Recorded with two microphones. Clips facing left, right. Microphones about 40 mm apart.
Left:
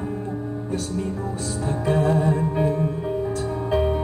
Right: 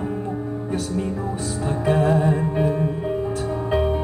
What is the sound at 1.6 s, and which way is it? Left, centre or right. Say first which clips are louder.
Music: right 2 dB; right.